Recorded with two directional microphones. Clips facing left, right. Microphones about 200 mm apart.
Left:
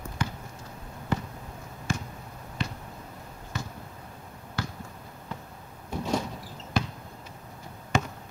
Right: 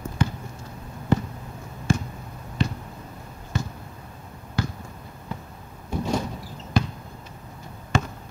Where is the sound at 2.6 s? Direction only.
30° right (ahead or behind).